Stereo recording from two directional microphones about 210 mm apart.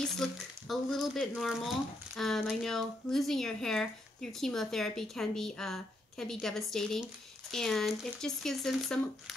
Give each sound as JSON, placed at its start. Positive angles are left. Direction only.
{"t": 0.0, "sound": "speech", "side_deg": 0}